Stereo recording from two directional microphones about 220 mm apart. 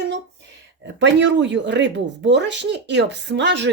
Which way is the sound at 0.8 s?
55° right (ahead or behind).